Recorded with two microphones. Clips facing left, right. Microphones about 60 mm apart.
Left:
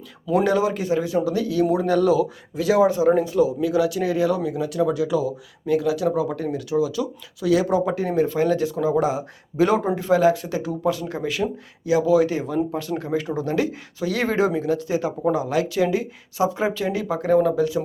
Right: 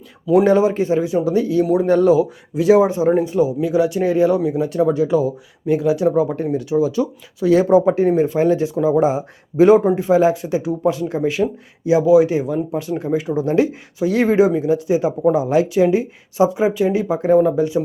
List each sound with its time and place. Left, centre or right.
0.4 s speech: right
4.7 s speech: right